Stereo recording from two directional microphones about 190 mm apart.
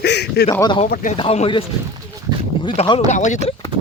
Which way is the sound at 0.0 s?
60° left (ahead or behind).